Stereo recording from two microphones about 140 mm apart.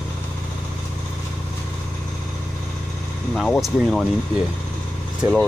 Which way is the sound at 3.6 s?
Centre (ahead or behind).